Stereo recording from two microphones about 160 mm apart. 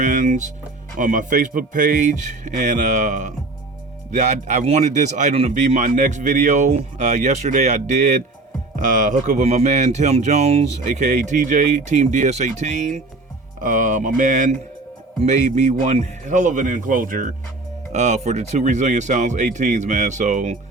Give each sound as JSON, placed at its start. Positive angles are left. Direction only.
{"t": 0.0, "sound": "speech", "side_deg": -55}
{"t": 17.9, "sound": "speech", "side_deg": -45}